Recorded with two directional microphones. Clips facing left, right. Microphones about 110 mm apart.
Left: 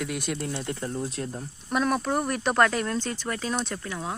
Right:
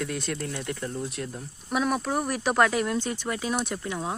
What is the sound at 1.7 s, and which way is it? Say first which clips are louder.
Speech: left 1 dB; 5° right (ahead or behind).